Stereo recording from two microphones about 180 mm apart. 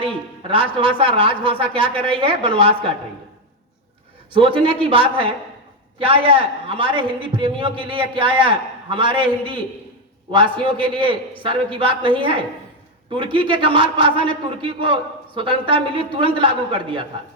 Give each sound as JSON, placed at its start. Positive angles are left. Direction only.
{"t": 0.0, "sound": "a man's voice", "side_deg": -30}
{"t": 4.3, "sound": "a man's voice", "side_deg": -30}